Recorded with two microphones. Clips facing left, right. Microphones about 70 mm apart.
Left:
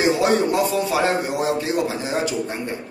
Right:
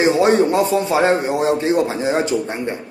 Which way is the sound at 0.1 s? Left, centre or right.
Right.